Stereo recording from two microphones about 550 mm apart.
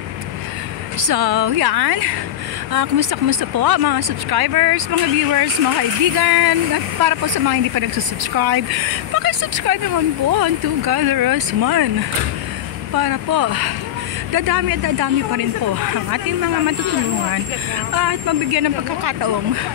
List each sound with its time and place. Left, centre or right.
1.0 s speech: right
12.9 s speech: right
17.9 s speech: right